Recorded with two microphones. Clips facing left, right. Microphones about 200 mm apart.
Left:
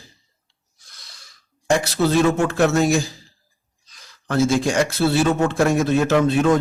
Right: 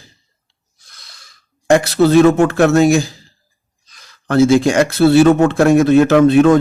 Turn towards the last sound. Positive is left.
turn(degrees=-70)  # may be behind; listen again after turning